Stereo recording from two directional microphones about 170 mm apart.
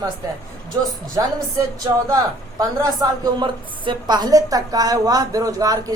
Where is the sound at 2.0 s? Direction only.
20° right (ahead or behind).